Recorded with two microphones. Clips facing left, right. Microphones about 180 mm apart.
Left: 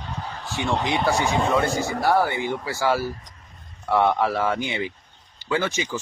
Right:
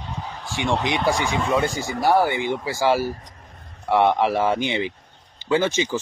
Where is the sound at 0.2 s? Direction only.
5° right (ahead or behind).